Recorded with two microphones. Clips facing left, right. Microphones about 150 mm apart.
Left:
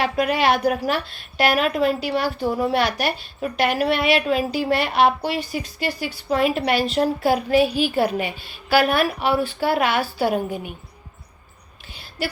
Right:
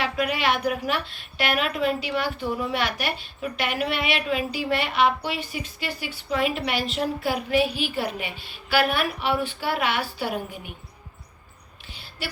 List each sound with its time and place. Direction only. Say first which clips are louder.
0.0 s a woman's voice: left 5 dB; 40° left (ahead or behind)